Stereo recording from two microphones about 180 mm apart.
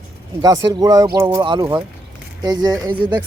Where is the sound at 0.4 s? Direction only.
20° right (ahead or behind).